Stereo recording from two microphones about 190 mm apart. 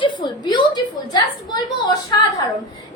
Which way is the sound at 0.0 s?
25° left (ahead or behind).